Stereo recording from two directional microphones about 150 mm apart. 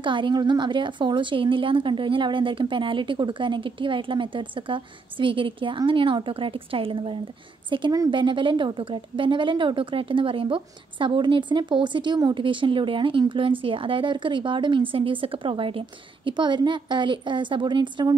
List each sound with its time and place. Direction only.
0.0 s a woman's voice: 35° right (ahead or behind)